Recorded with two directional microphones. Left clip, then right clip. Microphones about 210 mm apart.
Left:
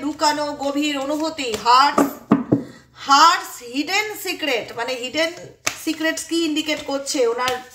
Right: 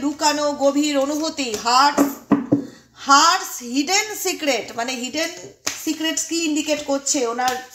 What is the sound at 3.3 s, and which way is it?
A woman's voice, 30° right (ahead or behind).